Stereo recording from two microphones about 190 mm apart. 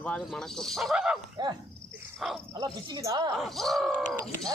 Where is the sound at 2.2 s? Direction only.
Centre (ahead or behind).